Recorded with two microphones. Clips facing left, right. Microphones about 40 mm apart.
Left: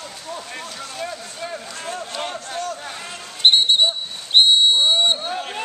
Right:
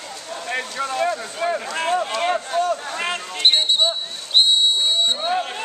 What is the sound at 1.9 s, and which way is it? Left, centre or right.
Speech, right.